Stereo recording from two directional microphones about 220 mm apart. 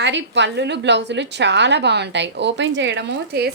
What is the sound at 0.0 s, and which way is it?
A woman's voice, 55° right (ahead or behind).